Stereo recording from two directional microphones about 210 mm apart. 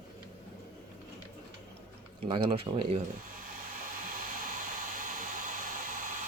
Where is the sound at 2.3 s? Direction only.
25° right (ahead or behind).